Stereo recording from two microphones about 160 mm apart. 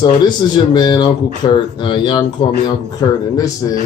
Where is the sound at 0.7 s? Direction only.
25° left (ahead or behind).